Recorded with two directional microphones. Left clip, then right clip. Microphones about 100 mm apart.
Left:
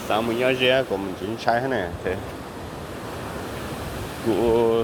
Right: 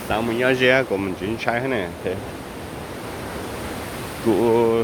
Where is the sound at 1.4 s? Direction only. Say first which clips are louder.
Left 1 dB; 45° right (ahead or behind).